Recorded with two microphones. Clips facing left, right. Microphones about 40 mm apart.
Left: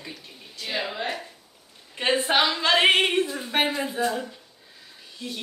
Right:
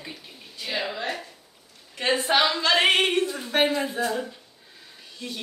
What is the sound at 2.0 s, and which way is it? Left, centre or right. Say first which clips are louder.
A woman's voice: even; centre.